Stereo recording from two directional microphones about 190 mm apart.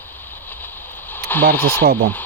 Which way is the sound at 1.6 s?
10° left (ahead or behind).